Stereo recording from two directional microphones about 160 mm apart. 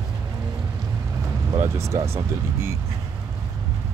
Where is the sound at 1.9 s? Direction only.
20° right (ahead or behind).